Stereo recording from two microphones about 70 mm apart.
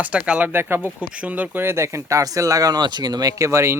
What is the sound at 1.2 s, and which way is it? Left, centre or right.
Speech, right.